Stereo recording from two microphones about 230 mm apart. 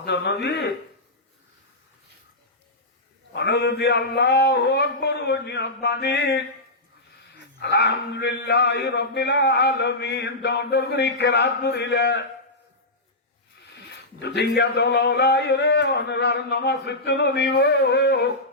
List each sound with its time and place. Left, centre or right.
0.0 s speech: left
3.3 s speech: left
7.6 s speech: left
14.2 s speech: left